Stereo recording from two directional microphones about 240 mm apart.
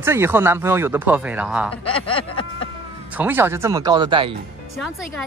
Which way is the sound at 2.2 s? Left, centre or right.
Left.